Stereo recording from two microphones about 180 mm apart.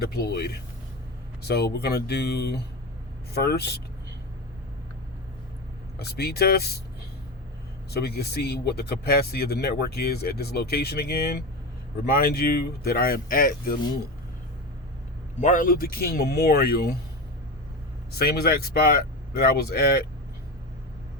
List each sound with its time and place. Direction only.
0.2 s speech: 65° left (ahead or behind)
6.0 s speech: 60° left (ahead or behind)
8.0 s speech: 60° left (ahead or behind)
15.4 s speech: 45° left (ahead or behind)
18.2 s speech: 60° left (ahead or behind)